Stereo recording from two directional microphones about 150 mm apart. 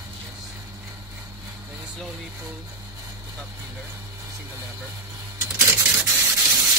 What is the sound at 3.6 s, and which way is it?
Speech, 15° right (ahead or behind).